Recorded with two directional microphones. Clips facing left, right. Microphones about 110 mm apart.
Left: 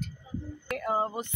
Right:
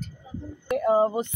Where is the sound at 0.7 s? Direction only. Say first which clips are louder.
Right 9 dB; 20° right (ahead or behind).